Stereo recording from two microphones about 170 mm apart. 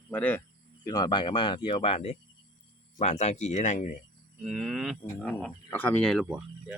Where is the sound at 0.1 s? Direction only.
10° left (ahead or behind).